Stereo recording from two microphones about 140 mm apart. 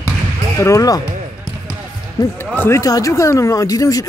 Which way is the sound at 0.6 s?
20° left (ahead or behind).